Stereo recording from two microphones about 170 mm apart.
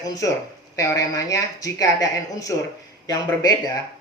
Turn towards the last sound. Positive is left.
turn(degrees=25)  # may be behind; listen again after turning